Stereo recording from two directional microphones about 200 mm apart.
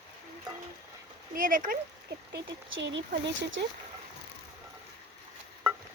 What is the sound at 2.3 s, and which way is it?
Speech, 65° right (ahead or behind).